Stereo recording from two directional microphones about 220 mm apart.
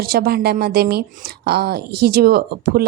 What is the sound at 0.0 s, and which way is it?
Speech, 45° right (ahead or behind).